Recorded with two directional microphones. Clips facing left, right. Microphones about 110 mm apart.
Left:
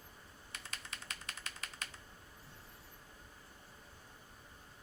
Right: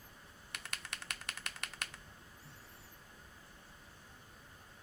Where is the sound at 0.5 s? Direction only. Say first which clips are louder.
Right 2 dB; 65° right (ahead or behind).